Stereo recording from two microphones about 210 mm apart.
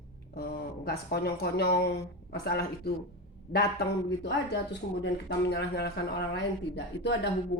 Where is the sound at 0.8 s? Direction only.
50° left (ahead or behind).